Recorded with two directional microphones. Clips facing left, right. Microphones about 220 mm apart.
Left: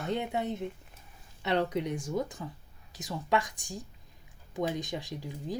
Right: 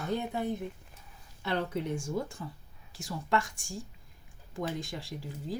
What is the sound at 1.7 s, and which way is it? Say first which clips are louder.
A woman's voice: left 1 dB; 15° left (ahead or behind).